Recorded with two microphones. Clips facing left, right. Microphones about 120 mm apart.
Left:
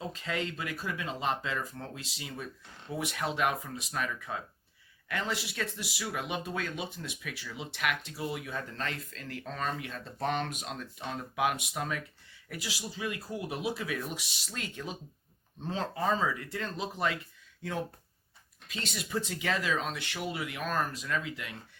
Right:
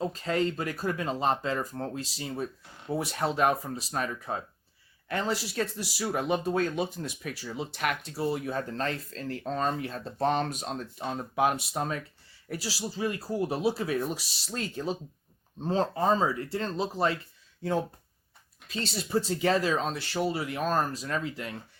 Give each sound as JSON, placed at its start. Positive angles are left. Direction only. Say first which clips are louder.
{"t": 0.0, "sound": "speech", "louder": "right 7 dB", "side_deg": -40}